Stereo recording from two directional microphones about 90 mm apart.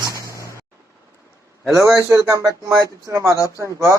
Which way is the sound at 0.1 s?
35° left (ahead or behind).